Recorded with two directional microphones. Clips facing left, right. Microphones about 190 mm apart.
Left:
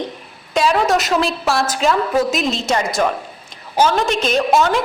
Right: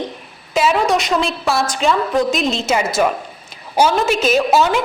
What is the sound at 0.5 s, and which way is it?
A woman's voice, 5° right (ahead or behind).